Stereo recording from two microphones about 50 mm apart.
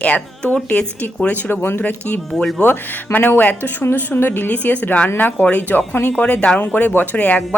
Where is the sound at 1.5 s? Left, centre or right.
Left.